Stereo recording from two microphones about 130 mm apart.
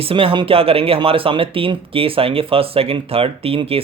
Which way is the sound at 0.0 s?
45° right (ahead or behind).